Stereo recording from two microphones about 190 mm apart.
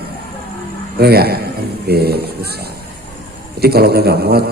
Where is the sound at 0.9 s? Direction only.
55° right (ahead or behind).